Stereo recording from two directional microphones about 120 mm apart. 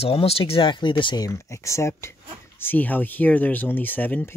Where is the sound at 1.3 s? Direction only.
25° left (ahead or behind).